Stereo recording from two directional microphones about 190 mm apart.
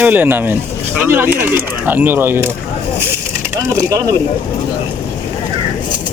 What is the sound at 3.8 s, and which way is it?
Speech, 15° right (ahead or behind).